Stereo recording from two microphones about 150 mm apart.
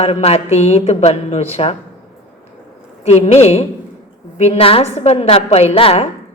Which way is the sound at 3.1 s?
45° left (ahead or behind).